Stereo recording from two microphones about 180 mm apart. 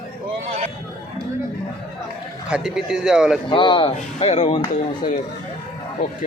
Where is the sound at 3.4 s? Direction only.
25° left (ahead or behind).